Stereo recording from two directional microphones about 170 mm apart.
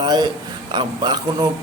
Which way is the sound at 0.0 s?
25° right (ahead or behind).